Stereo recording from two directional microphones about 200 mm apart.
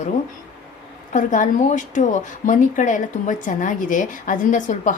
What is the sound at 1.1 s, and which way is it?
A woman's voice, 40° left (ahead or behind).